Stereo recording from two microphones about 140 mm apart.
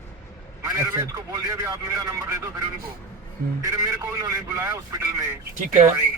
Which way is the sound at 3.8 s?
20° right (ahead or behind).